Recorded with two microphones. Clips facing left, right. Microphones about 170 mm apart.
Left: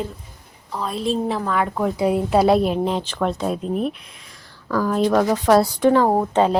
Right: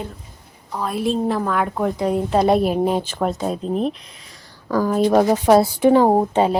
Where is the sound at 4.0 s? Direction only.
Centre (ahead or behind).